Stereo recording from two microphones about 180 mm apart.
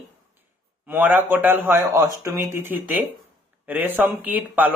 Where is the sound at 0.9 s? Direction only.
10° right (ahead or behind).